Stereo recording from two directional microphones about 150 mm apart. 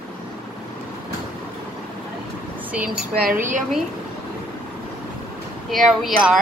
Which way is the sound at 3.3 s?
60° right (ahead or behind).